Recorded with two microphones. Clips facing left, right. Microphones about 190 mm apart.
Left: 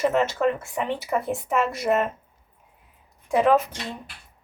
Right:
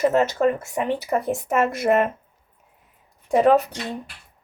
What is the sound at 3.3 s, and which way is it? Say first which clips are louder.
Speech: right 3 dB; 40° right (ahead or behind).